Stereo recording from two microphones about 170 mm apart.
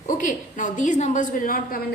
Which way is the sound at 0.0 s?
50° left (ahead or behind).